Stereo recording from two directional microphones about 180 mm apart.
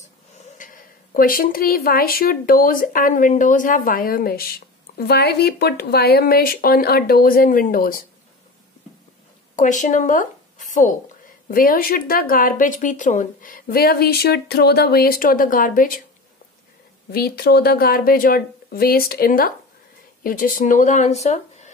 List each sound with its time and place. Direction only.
0.6 s a woman's voice: 50° left (ahead or behind)
9.6 s a woman's voice: 45° left (ahead or behind)
17.1 s a woman's voice: 60° left (ahead or behind); by 21.7 s 40° left (ahead or behind)